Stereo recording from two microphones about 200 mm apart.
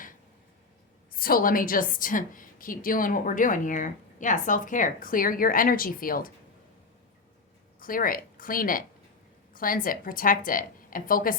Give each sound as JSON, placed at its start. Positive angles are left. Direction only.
{"t": 1.1, "sound": "a woman's voice", "side_deg": 45}
{"t": 7.8, "sound": "a woman's voice", "side_deg": 45}